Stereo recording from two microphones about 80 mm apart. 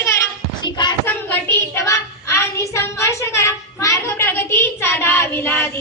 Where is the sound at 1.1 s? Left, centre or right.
Left.